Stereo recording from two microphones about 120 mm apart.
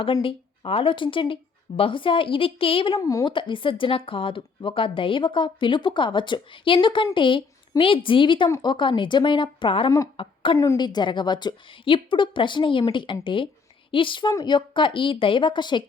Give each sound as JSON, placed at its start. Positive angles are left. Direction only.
{"t": 0.0, "sound": "speech", "side_deg": 50}
{"t": 3.0, "sound": "speech", "side_deg": 30}
{"t": 3.2, "sound": "speech", "side_deg": 40}
{"t": 10.2, "sound": "a sound", "side_deg": 45}
{"t": 10.8, "sound": "a woman's voice", "side_deg": 40}